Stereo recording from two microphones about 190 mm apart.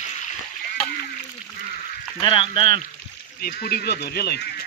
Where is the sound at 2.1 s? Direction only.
25° left (ahead or behind).